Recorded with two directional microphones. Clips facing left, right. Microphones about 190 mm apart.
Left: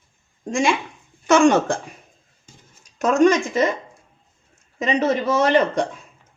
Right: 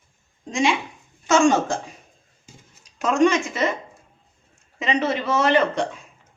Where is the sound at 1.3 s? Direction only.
60° left (ahead or behind).